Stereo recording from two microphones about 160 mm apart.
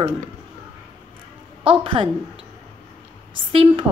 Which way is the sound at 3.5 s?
35° right (ahead or behind).